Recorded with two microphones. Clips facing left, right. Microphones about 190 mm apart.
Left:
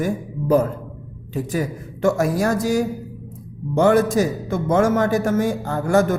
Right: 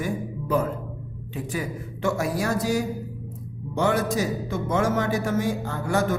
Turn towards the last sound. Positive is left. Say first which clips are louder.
# left 6 dB
turn(degrees=45)  # may be behind; listen again after turning